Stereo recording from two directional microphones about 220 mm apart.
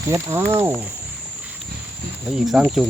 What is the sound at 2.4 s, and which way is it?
Speech, centre (ahead or behind).